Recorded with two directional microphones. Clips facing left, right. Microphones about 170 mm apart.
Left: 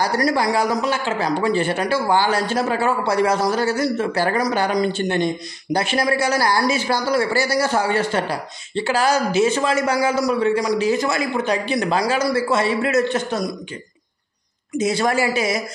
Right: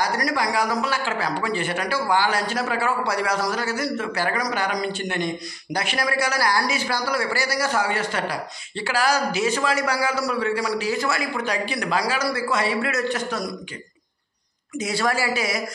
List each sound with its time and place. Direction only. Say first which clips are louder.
0.0 s a man's voice: left 5 dB; 30° left (ahead or behind)
14.8 s a man's voice: left 5 dB; 20° left (ahead or behind)